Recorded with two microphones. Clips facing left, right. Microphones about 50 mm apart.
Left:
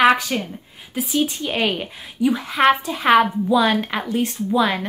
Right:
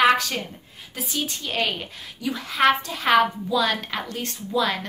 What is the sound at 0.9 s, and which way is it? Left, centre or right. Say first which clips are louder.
A woman's voice: left 8 dB; centre.